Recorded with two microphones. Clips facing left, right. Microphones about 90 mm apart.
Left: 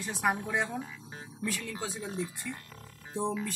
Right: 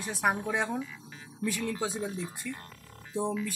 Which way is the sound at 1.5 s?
20° right (ahead or behind).